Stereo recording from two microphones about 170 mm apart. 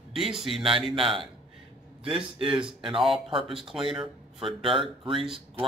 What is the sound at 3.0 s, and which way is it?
Speech, centre (ahead or behind).